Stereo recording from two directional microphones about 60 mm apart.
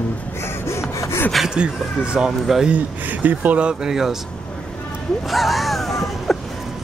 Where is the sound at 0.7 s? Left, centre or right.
Left.